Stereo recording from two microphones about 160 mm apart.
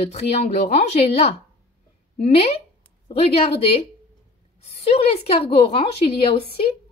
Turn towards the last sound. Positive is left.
turn(degrees=35)  # may be behind; listen again after turning